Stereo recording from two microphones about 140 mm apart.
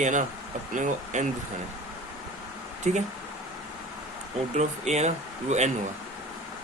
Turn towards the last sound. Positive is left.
turn(degrees=-55)  # may be behind; listen again after turning